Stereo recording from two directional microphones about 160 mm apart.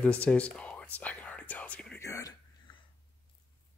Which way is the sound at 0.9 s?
10° left (ahead or behind).